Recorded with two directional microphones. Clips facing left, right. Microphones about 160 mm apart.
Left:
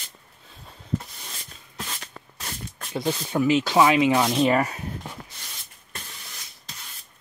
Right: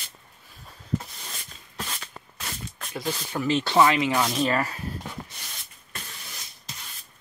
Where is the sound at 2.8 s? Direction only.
20° left (ahead or behind).